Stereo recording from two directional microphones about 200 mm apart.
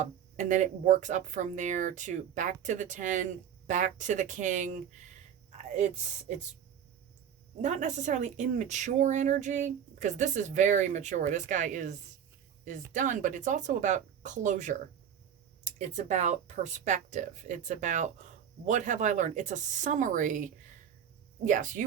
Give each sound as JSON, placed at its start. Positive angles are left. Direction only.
{"t": 0.0, "sound": "speech", "side_deg": -40}
{"t": 7.6, "sound": "speech", "side_deg": -35}
{"t": 15.8, "sound": "speech", "side_deg": -35}